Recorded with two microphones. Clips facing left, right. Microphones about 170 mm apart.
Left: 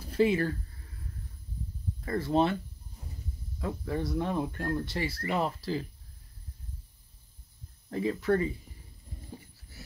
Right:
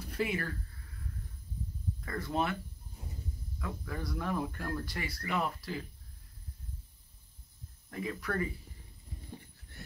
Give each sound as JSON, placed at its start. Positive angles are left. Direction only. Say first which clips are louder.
{"t": 0.0, "sound": "speech", "louder": "left 9 dB", "side_deg": 30}
{"t": 2.0, "sound": "speech", "louder": "left 7 dB", "side_deg": 30}
{"t": 3.5, "sound": "speech", "louder": "left 8 dB", "side_deg": 30}
{"t": 7.9, "sound": "speech", "louder": "left 9 dB", "side_deg": 30}
{"t": 9.7, "sound": "a sound", "louder": "even", "side_deg": 5}